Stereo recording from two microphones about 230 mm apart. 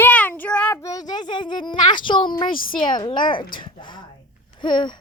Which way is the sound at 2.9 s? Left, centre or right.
Centre.